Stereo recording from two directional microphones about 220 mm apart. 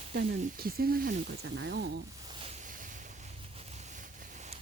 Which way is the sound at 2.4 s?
30° right (ahead or behind).